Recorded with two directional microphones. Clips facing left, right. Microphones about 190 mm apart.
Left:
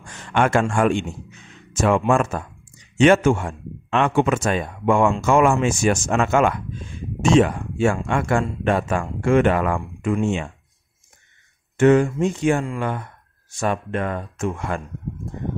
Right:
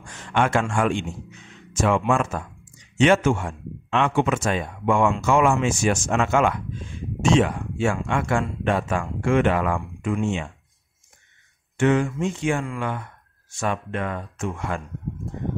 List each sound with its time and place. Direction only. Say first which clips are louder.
0.3 s speech: left 3 dB; 50° left (ahead or behind)
11.7 s speech: left 5 dB; 45° left (ahead or behind)